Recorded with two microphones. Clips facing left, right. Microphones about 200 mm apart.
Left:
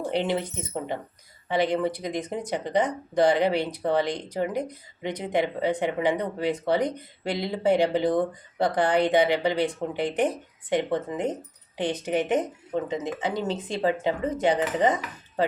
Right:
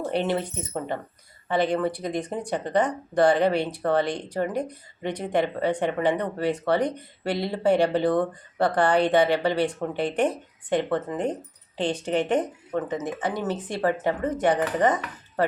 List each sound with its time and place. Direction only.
0.0 s speech: 15° left (ahead or behind)
13.1 s speech: 10° left (ahead or behind)